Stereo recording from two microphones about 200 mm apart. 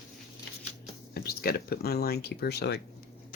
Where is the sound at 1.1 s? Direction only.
50° left (ahead or behind).